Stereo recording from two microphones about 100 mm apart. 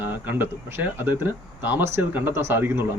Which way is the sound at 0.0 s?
20° right (ahead or behind).